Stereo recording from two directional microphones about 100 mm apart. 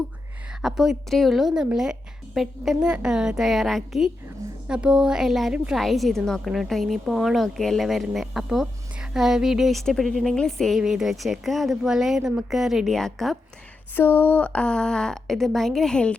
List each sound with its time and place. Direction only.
0.6 s a woman's voice: 5° right (ahead or behind)
13.9 s a woman's voice: 20° left (ahead or behind)